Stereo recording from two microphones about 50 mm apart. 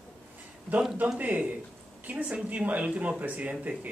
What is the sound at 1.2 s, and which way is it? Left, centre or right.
Speech, right.